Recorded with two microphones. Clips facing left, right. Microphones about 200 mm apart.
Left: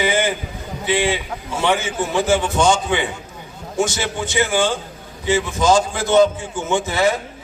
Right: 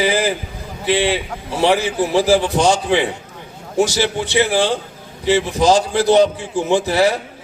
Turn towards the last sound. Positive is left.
turn(degrees=-35)  # may be behind; listen again after turning